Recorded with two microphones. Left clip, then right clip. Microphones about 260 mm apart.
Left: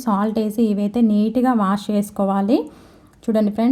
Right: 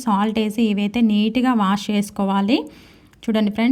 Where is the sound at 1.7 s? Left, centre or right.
Right.